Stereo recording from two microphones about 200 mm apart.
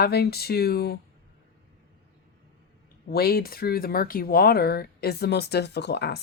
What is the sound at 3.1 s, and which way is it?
Speech, 50° left (ahead or behind).